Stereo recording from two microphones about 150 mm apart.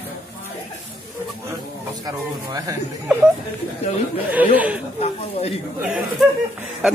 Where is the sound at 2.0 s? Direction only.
25° right (ahead or behind).